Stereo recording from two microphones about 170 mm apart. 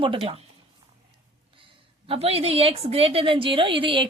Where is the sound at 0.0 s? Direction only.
30° right (ahead or behind).